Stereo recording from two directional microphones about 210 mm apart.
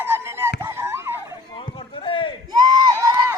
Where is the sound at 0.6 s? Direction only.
10° right (ahead or behind).